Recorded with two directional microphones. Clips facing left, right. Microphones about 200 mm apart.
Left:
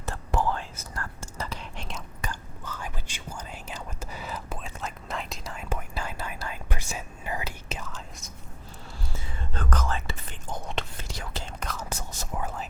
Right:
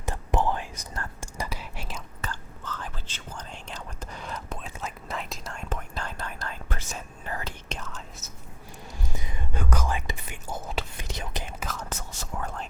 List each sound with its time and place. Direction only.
0.0 s whispering: 15° right (ahead or behind)
2.2 s whispering: 10° left (ahead or behind)
9.1 s whispering: 15° right (ahead or behind)
11.1 s whispering: 20° right (ahead or behind)
11.6 s whispering: centre (ahead or behind)
11.9 s whispering: 15° left (ahead or behind)